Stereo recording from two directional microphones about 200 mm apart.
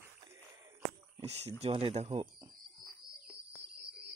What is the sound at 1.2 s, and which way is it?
Speech, 35° right (ahead or behind).